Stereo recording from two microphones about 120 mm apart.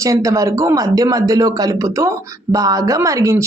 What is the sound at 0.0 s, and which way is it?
Speech, 30° right (ahead or behind).